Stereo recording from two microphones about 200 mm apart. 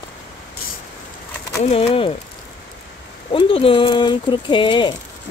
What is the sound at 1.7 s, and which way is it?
Speech, 25° left (ahead or behind).